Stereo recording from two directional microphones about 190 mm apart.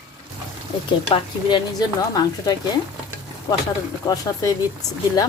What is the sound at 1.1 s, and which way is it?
Speech, 25° left (ahead or behind).